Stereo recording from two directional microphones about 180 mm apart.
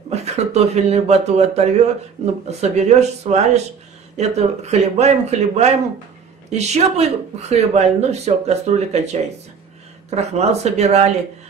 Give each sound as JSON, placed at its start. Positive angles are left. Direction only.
{"t": 0.1, "sound": "speech", "side_deg": -35}